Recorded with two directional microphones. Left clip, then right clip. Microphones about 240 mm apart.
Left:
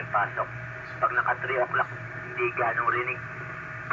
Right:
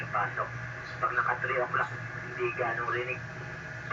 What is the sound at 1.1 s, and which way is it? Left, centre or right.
Speech, centre.